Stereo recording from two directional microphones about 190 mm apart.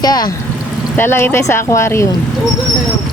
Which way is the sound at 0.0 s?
20° left (ahead or behind).